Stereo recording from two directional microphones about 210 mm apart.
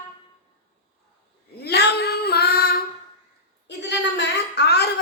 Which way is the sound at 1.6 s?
50° left (ahead or behind).